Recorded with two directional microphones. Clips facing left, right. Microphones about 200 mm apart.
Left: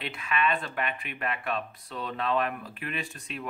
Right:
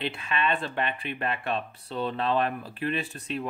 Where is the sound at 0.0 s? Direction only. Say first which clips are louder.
Even; 30° right (ahead or behind).